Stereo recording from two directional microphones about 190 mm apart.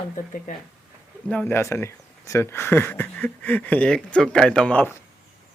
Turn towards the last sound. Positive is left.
turn(degrees=10)  # may be behind; listen again after turning